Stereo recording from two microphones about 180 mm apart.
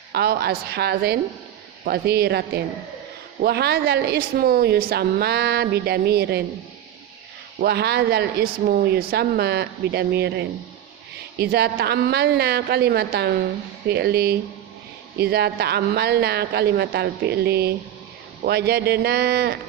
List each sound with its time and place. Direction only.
0.1 s a woman's voice: 65° right (ahead or behind)
3.4 s a woman's voice: 65° right (ahead or behind)
7.6 s a woman's voice: 65° right (ahead or behind)